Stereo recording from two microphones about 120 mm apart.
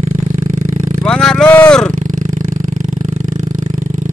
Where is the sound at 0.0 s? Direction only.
90° right.